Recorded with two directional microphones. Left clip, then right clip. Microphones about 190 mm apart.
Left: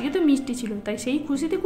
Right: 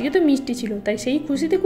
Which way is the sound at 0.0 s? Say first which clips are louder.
Right 3 dB; 15° right (ahead or behind).